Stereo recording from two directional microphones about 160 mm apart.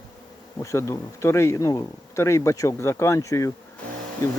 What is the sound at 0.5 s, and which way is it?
Speech, 20° left (ahead or behind).